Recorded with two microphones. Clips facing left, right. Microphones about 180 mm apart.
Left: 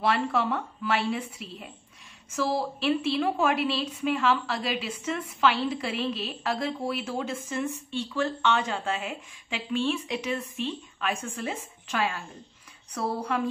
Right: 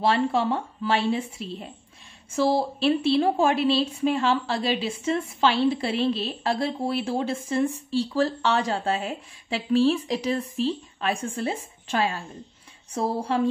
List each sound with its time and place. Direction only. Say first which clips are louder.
0.0 s a woman's voice: right 4 dB; 30° right (ahead or behind)